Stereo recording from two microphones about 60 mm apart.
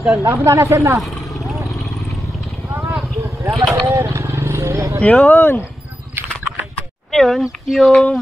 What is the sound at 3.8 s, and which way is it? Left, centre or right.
Vehicle, right.